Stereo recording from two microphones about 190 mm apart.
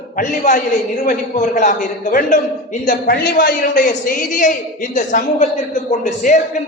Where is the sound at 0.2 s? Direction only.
40° left (ahead or behind).